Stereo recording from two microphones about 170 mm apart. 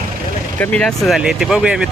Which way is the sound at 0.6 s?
5° left (ahead or behind).